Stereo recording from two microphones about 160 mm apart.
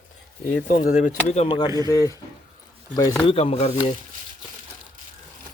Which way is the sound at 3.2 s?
35° left (ahead or behind).